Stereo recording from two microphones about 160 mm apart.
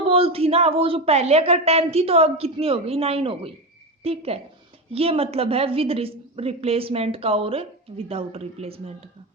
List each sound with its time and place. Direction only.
0.1 s a woman's voice: 35° right (ahead or behind)